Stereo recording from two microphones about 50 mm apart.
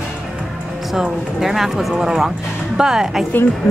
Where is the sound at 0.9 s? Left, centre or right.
Centre.